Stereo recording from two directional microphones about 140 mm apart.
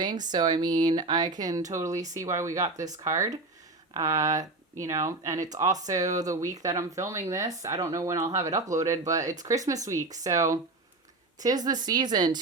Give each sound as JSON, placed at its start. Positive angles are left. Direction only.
{"t": 0.0, "sound": "speech", "side_deg": -30}